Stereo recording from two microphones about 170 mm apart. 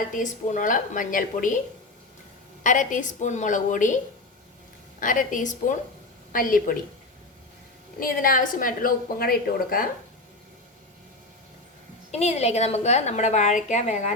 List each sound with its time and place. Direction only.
0.1 s a woman's voice: 50° left (ahead or behind)
2.6 s a woman's voice: 50° left (ahead or behind)
4.9 s a woman's voice: 50° left (ahead or behind)
7.9 s a woman's voice: 55° left (ahead or behind)
12.1 s a woman's voice: 40° left (ahead or behind)